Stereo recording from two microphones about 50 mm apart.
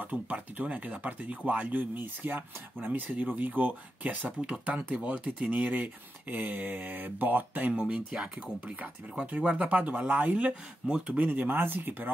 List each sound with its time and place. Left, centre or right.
0.0 s speech: right
4.4 s speech: right
7.7 s speech: centre
9.2 s speech: right
11.2 s speech: right